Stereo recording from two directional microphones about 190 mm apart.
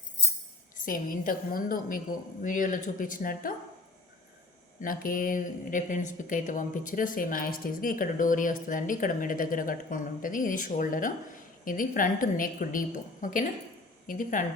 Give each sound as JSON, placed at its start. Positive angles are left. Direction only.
{"t": 0.9, "sound": "speech", "side_deg": 45}
{"t": 4.8, "sound": "speech", "side_deg": 45}